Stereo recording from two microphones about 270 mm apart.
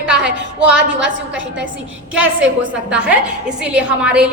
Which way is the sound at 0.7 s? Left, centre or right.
Right.